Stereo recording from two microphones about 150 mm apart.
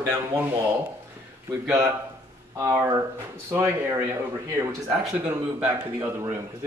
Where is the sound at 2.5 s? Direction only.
20° right (ahead or behind).